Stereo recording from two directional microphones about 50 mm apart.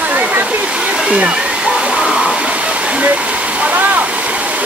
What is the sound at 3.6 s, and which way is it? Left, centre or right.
Waterfall, right.